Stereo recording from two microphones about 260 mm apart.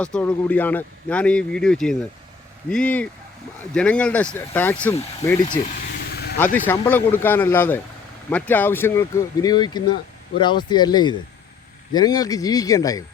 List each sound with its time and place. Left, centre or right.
0.0 s speech: centre
6.7 s speech: centre